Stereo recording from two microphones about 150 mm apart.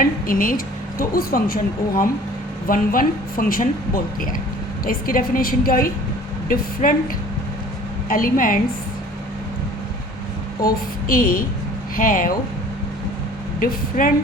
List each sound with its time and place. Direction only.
0.0 s a woman's voice: 70° left (ahead or behind)
2.6 s speech: 70° left (ahead or behind)
6.8 s speech: 55° left (ahead or behind)
8.1 s speech: 65° left (ahead or behind)
10.6 s speech: 75° left (ahead or behind)
13.6 s speech: 65° left (ahead or behind)